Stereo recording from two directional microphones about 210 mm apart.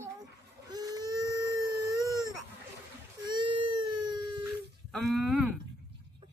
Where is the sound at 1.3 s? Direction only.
15° right (ahead or behind).